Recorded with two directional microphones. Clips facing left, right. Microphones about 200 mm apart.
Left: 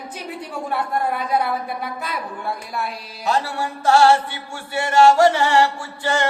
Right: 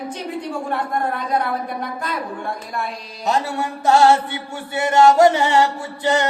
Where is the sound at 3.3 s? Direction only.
20° right (ahead or behind).